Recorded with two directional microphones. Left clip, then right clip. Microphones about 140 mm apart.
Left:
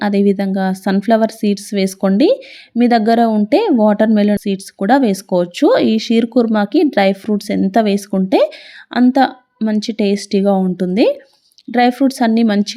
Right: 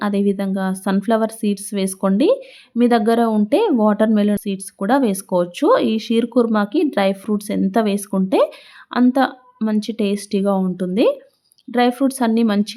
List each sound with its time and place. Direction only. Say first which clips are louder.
0.0 s a woman's voice: left 5 dB; 20° left (ahead or behind)